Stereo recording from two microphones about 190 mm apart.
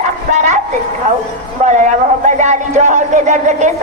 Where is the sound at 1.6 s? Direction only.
40° right (ahead or behind).